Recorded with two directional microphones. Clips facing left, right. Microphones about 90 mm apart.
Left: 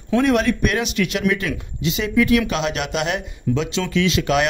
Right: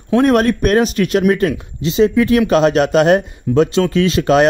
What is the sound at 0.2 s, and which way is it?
Speech, 45° right (ahead or behind).